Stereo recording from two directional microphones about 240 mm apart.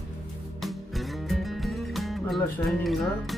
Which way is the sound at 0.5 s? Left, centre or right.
Centre.